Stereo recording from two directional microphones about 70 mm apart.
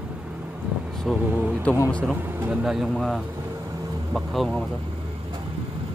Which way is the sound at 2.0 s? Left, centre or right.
Right.